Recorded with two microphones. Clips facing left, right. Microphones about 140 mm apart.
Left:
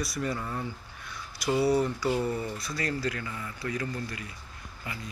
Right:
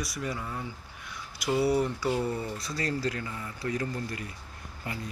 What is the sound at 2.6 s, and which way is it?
Speech, 35° right (ahead or behind).